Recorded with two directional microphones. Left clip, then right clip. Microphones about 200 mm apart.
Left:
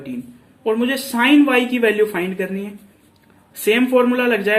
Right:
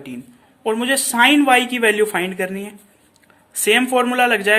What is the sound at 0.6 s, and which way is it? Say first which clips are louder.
Speech: right 1 dB; 45° right (ahead or behind).